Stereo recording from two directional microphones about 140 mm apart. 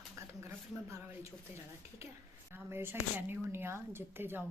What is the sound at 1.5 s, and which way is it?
A woman's voice, 20° right (ahead or behind).